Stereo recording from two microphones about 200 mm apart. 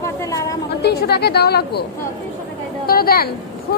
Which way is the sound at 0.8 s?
55° left (ahead or behind).